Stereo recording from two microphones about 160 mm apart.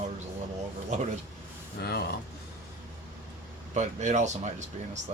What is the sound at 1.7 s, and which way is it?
Speech, 90° left.